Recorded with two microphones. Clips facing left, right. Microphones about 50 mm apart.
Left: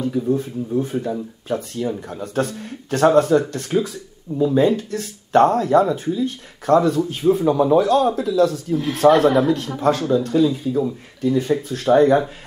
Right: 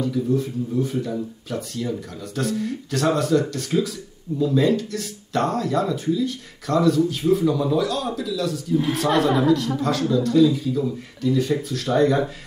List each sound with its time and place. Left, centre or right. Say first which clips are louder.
0.0 s speech: left 2 dB; left